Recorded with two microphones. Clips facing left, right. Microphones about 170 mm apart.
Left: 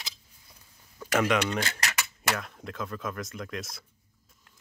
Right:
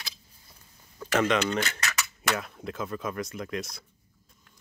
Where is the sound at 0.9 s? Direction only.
5° left (ahead or behind).